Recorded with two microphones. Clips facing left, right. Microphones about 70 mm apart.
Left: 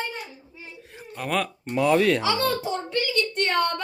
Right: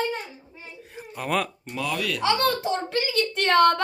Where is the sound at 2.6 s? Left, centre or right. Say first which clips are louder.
Right 1 dB; right.